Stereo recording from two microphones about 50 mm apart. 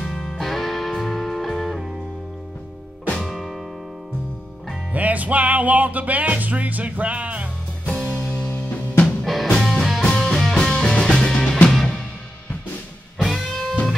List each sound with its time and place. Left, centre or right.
0.0 s music: centre
3.2 s music: centre
4.9 s music: right
7.8 s music: centre
9.2 s music: centre
10.0 s music: centre
11.7 s music: centre
13.2 s music: centre